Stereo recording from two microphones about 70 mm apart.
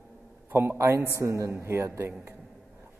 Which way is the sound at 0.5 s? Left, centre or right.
Right.